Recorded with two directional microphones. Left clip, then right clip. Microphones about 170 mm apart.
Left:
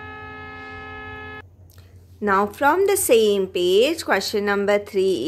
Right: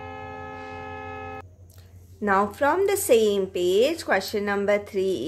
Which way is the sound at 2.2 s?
25° left (ahead or behind).